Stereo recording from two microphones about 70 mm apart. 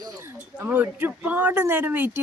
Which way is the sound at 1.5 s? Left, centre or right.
Right.